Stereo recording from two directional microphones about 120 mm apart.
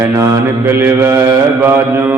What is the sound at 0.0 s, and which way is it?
Mantra, 20° right (ahead or behind).